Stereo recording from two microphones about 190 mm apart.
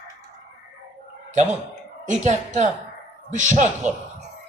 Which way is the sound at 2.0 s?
40° right (ahead or behind).